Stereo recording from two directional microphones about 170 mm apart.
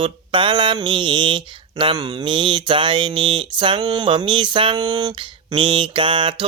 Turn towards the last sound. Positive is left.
turn(degrees=-30)  # may be behind; listen again after turning